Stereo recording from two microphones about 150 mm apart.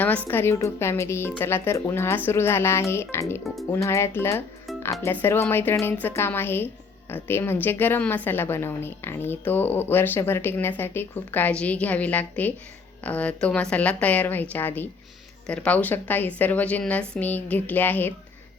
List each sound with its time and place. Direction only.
0.3 s a woman's voice: 15° left (ahead or behind)
3.4 s speech: centre (ahead or behind)
3.7 s a woman's voice: 20° left (ahead or behind)